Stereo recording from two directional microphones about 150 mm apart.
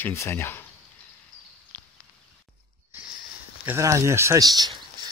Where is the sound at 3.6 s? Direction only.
20° right (ahead or behind).